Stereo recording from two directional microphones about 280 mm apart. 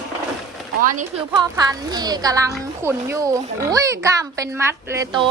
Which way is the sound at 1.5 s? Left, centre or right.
Centre.